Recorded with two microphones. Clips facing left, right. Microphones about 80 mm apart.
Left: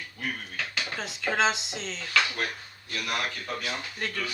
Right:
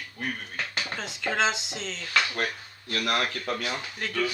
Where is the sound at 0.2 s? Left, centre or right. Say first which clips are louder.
Right 1 dB; right.